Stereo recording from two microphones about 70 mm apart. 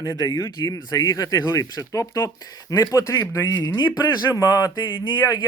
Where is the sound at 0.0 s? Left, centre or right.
Left.